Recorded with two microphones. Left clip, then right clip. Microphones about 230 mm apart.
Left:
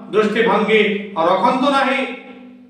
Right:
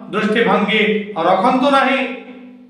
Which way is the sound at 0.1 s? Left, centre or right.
Centre.